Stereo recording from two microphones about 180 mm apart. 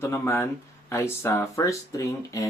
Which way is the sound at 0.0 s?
15° left (ahead or behind).